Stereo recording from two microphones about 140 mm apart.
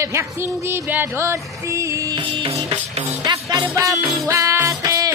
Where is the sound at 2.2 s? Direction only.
35° right (ahead or behind).